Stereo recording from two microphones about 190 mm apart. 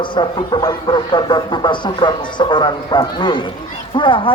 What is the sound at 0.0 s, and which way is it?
A man's voice, 25° left (ahead or behind).